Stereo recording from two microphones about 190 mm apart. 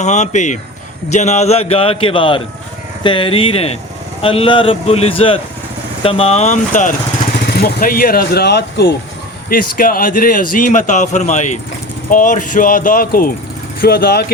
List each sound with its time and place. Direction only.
0.0 s a man's voice: 40° left (ahead or behind)
7.3 s a man's voice: 55° left (ahead or behind)
9.5 s a man's voice: 50° left (ahead or behind)